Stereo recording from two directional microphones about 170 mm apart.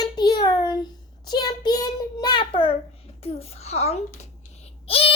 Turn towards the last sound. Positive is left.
turn(degrees=35)  # may be behind; listen again after turning